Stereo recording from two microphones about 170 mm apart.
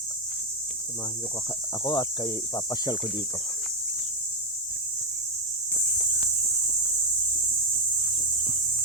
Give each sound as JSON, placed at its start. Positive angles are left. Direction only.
{"t": 1.8, "sound": "speech", "side_deg": 25}